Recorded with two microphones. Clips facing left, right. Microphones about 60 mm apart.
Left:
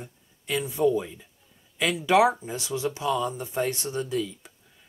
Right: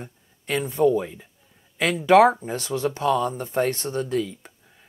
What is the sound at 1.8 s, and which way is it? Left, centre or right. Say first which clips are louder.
Speech: right 5 dB; right.